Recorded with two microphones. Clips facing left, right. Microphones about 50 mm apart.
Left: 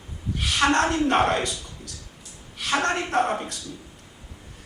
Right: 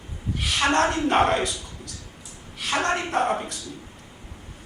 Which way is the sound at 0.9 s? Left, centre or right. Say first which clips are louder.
Even; centre.